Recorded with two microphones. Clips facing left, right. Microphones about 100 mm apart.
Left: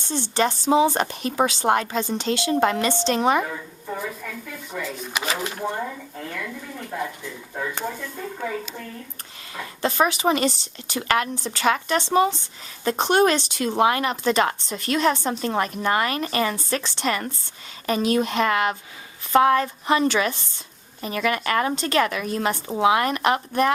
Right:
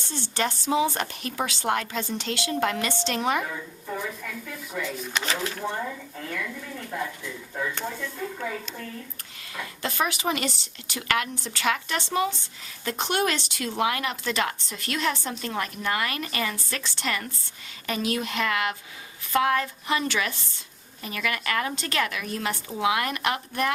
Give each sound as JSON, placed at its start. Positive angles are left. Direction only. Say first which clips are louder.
{"t": 0.1, "sound": "a woman's voice", "louder": "left 6 dB", "side_deg": 30}
{"t": 3.4, "sound": "speech", "louder": "left 2 dB", "side_deg": 10}
{"t": 5.2, "sound": "speech", "louder": "left 4 dB", "side_deg": 15}
{"t": 9.6, "sound": "a woman's voice", "louder": "left 6 dB", "side_deg": 30}